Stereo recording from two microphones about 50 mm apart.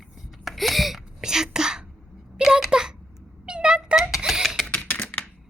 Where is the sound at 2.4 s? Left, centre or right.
Centre.